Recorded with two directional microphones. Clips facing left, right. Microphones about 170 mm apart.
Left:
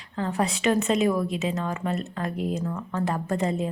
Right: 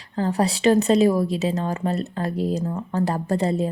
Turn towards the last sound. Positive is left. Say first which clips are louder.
# right 4 dB
turn(degrees=-35)  # may be behind; listen again after turning